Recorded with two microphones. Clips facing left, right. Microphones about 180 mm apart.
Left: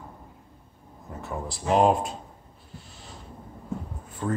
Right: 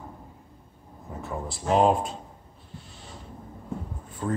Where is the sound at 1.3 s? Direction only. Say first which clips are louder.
Even; centre (ahead or behind).